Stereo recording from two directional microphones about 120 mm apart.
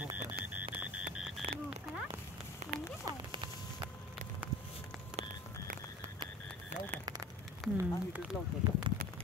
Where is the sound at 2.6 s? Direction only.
70° right (ahead or behind).